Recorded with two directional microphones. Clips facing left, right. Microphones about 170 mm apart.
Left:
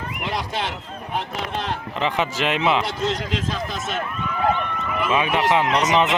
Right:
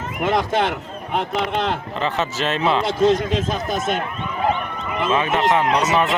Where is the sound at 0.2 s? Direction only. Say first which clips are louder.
Right 9 dB; 50° right (ahead or behind).